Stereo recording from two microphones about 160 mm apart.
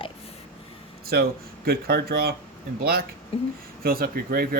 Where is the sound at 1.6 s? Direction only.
70° right (ahead or behind).